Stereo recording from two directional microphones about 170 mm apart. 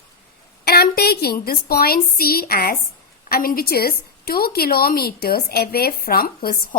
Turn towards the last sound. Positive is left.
turn(degrees=60)  # may be behind; listen again after turning